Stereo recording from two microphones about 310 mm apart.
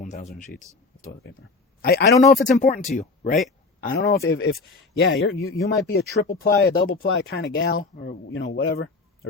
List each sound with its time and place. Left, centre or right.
0.0 s speech: left
1.0 s speech: left